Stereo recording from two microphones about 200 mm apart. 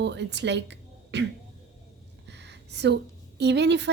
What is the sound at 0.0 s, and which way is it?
Speech, 60° right (ahead or behind).